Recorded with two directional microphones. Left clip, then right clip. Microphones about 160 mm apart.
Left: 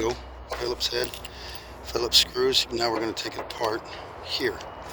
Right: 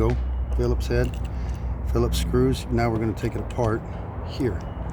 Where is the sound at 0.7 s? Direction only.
20° right (ahead or behind).